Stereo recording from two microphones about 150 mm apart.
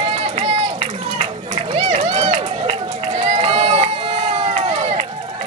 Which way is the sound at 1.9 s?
45° right (ahead or behind).